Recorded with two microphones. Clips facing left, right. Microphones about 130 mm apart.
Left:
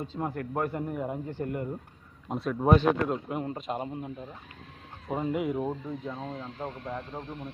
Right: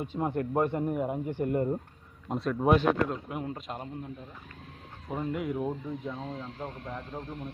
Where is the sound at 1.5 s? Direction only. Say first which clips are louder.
Right 6 dB; 30° right (ahead or behind).